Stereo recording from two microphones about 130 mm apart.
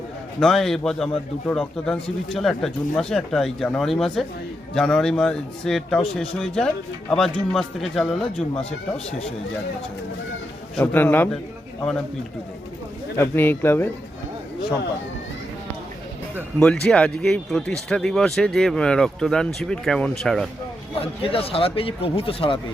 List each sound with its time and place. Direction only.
0.3 s speech: centre (ahead or behind)
2.4 s speech: centre (ahead or behind)
10.8 s speech: 15° left (ahead or behind)
13.1 s speech: 15° left (ahead or behind)
16.6 s speech: 5° left (ahead or behind)
21.0 s speech: 45° left (ahead or behind)